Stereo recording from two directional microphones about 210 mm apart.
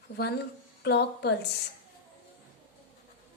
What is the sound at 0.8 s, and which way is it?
Speech, 50° left (ahead or behind).